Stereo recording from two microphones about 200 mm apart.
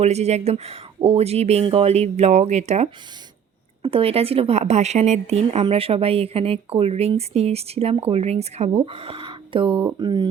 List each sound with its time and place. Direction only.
0.0 s a woman's voice: 35° right (ahead or behind)